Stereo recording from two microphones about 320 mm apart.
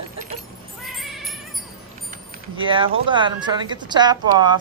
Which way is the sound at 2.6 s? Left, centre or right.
Centre.